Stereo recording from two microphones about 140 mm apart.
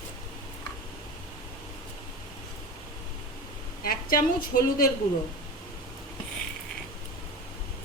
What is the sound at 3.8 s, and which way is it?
A woman's voice, 90° left.